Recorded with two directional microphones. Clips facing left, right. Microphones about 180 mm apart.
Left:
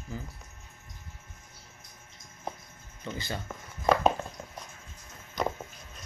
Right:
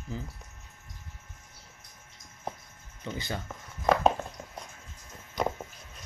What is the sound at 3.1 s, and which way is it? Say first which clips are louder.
Speech: right 1 dB; 15° right (ahead or behind).